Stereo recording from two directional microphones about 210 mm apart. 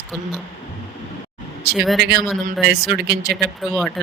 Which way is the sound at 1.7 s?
Centre (ahead or behind).